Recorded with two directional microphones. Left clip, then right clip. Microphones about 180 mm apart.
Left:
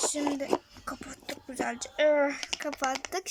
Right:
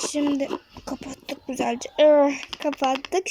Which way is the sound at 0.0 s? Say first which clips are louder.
Right 6 dB; 10° right (ahead or behind).